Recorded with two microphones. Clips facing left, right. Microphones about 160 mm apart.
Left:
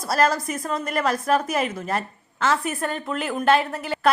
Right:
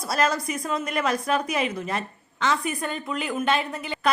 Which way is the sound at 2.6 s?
50° left (ahead or behind).